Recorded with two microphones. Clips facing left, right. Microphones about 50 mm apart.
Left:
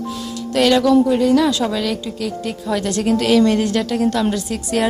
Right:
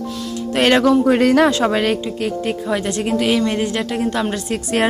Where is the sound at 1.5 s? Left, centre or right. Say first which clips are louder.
Right 3 dB; right.